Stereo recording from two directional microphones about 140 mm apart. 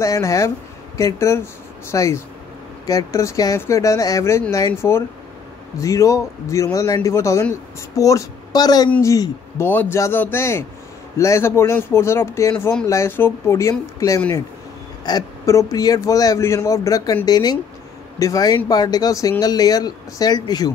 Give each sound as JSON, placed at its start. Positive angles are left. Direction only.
{"t": 0.0, "sound": "a man's voice", "side_deg": 25}